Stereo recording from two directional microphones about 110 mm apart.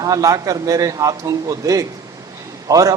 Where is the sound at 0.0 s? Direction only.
30° right (ahead or behind).